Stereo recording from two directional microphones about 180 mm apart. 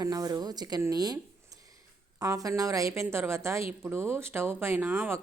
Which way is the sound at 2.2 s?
20° right (ahead or behind).